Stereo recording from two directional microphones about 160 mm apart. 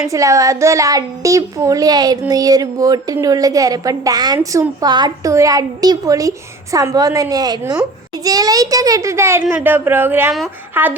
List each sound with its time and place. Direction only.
0.1 s a woman's voice: 20° right (ahead or behind)
4.4 s speech: 10° right (ahead or behind)
4.8 s a woman's voice: 25° right (ahead or behind)